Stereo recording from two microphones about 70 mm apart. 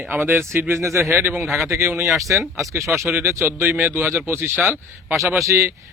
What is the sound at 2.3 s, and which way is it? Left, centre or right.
Speech, right.